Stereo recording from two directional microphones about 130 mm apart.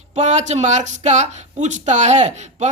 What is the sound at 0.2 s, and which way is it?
Speech, 65° right (ahead or behind).